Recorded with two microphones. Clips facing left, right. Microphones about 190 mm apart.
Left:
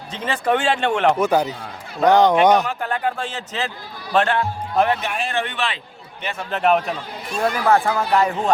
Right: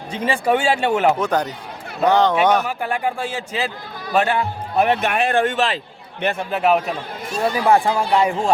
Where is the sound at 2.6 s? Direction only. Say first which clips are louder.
Right 1 dB; 10° right (ahead or behind).